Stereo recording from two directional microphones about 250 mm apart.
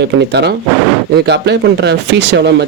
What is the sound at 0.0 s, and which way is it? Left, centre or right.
Speech, right.